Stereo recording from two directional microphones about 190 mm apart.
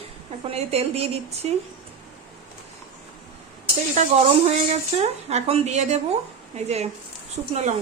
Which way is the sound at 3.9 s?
40° right (ahead or behind).